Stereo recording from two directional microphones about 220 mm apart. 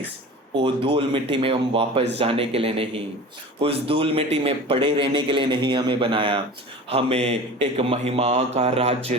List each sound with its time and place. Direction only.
0.6 s speech: 25° right (ahead or behind)